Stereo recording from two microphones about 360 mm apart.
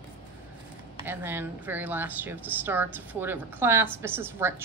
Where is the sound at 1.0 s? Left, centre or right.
Centre.